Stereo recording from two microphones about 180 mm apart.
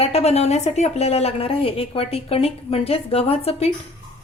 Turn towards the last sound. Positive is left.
turn(degrees=35)  # may be behind; listen again after turning